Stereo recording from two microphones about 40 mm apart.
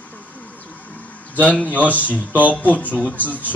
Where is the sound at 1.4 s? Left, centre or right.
Left.